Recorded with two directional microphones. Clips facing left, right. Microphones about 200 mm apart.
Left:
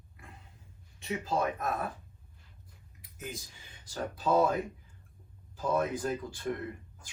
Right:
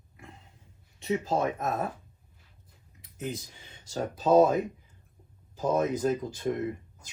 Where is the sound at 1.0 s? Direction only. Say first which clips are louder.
Right 4 dB; 25° right (ahead or behind).